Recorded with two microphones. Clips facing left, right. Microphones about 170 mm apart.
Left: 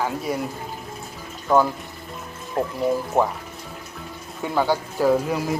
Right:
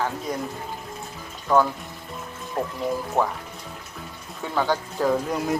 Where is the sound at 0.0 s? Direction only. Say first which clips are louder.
Left 2 dB; 10° left (ahead or behind).